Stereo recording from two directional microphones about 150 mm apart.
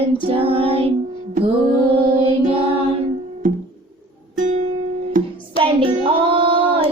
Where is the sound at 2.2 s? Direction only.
35° right (ahead or behind).